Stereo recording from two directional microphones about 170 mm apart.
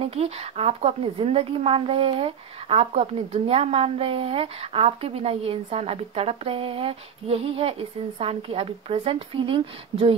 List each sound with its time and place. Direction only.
0.0 s speech: 35° right (ahead or behind)